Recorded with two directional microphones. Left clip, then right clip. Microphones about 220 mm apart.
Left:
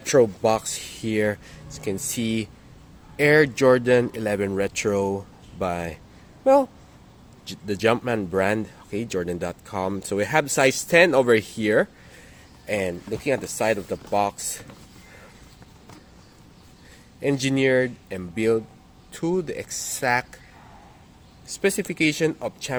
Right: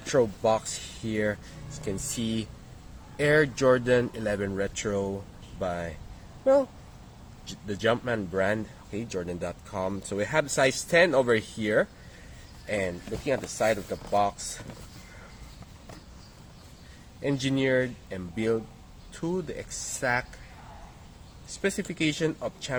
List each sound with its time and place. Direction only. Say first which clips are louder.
0.0 s speech: left 6 dB; 35° left (ahead or behind)
17.2 s speech: left 5 dB; 35° left (ahead or behind)
21.6 s speech: left 6 dB; 40° left (ahead or behind)